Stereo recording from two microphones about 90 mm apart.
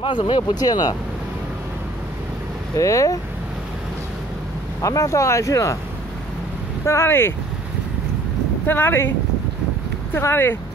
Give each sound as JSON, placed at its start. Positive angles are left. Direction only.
{"t": 0.0, "sound": "speech", "side_deg": 70}
{"t": 2.7, "sound": "speech", "side_deg": 35}
{"t": 4.8, "sound": "speech", "side_deg": 35}
{"t": 6.9, "sound": "speech", "side_deg": 30}
{"t": 8.6, "sound": "speech", "side_deg": 20}
{"t": 10.1, "sound": "speech", "side_deg": 25}